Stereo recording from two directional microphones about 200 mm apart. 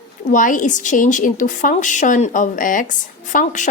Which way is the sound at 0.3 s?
40° left (ahead or behind).